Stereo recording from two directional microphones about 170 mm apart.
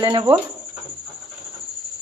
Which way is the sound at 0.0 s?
25° right (ahead or behind).